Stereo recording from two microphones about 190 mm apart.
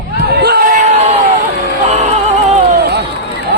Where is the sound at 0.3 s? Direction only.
55° right (ahead or behind).